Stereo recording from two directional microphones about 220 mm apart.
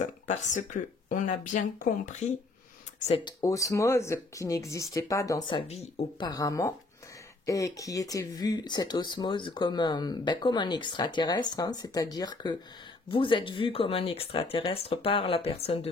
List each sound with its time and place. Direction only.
0.0 s speech: 35° left (ahead or behind)
3.1 s speech: 20° left (ahead or behind)
5.5 s speech: 30° left (ahead or behind)